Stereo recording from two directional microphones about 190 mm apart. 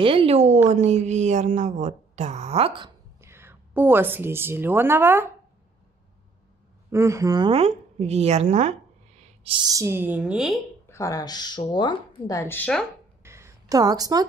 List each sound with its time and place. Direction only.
0.0 s speech: 30° right (ahead or behind)
3.2 s a woman's voice: 15° right (ahead or behind)
6.9 s speech: 15° right (ahead or behind)
10.9 s speech: 15° left (ahead or behind)
13.2 s a sound: 15° right (ahead or behind)